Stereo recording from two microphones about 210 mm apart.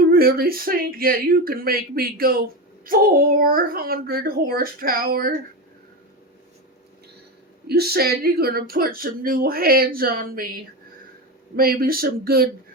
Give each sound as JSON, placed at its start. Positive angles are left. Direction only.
{"t": 0.1, "sound": "speech", "side_deg": -45}
{"t": 7.7, "sound": "speech", "side_deg": -50}
{"t": 11.5, "sound": "speech", "side_deg": -45}